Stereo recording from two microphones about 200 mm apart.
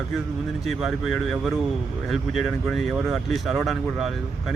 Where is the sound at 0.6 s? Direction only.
Centre (ahead or behind).